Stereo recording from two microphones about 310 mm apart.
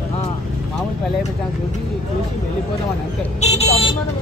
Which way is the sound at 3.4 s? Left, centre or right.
Centre.